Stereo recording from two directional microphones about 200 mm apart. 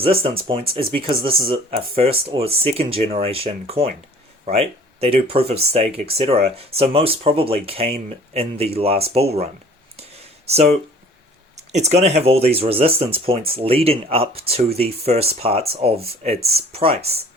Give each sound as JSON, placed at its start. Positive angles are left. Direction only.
{"t": 0.0, "sound": "speech", "side_deg": -30}
{"t": 10.5, "sound": "speech", "side_deg": -30}